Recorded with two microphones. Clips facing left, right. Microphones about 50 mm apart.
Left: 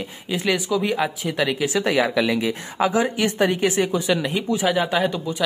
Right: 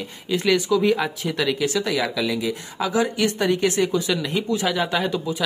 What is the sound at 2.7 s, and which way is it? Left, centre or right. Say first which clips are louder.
A man's voice: left 2 dB; left.